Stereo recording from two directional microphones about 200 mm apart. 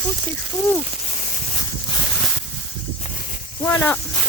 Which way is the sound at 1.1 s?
35° left (ahead or behind).